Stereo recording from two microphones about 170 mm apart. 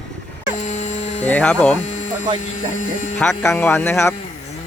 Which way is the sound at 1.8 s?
45° left (ahead or behind).